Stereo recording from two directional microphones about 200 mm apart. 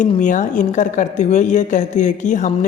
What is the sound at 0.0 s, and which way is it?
A woman's voice, 40° left (ahead or behind).